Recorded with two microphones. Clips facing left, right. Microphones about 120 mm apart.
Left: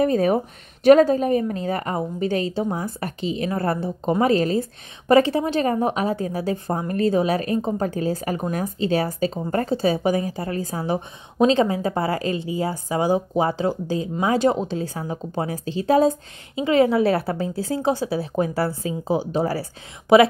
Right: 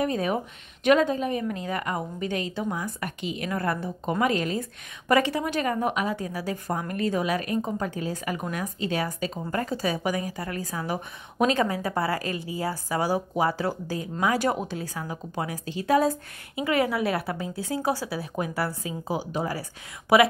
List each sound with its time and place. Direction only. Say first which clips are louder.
0.0 s a woman's voice: left 7 dB; 40° left (ahead or behind)